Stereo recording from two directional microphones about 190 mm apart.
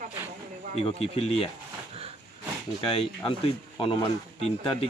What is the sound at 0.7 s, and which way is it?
Speech, 30° left (ahead or behind).